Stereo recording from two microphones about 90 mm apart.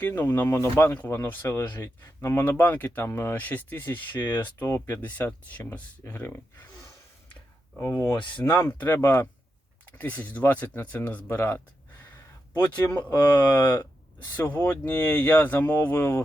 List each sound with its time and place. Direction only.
0.0 s speech: 25° left (ahead or behind)
7.8 s speech: 30° left (ahead or behind)
8.1 s speech: 60° left (ahead or behind)
8.4 s speech: 25° left (ahead or behind)
10.0 s speech: 20° left (ahead or behind)
12.5 s speech: 15° left (ahead or behind)